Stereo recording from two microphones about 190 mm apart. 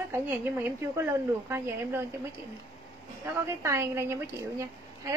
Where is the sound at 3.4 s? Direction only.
15° right (ahead or behind).